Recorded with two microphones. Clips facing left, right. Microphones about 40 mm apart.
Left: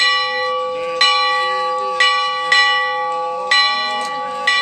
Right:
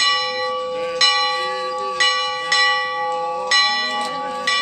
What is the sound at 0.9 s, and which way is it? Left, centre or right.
Church bell, left.